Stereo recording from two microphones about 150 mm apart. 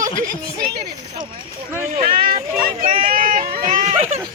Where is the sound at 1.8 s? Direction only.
60° right (ahead or behind).